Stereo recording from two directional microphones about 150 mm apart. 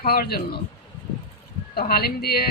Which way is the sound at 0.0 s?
85° left.